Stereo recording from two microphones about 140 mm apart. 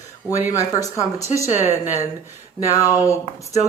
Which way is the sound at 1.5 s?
15° right (ahead or behind).